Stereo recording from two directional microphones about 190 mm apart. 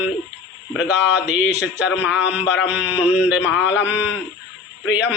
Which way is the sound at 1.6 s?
65° left (ahead or behind).